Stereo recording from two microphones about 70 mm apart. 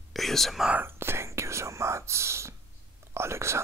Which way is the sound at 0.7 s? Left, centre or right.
Right.